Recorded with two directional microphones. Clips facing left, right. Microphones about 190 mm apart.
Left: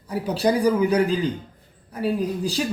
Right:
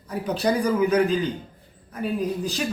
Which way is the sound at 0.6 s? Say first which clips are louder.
Right 1 dB; 35° left (ahead or behind).